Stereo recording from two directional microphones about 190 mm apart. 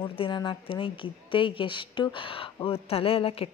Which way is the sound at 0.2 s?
25° left (ahead or behind).